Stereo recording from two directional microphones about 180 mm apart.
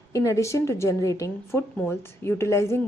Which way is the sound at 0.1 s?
15° left (ahead or behind).